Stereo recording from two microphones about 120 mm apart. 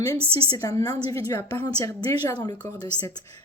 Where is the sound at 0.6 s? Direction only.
30° left (ahead or behind).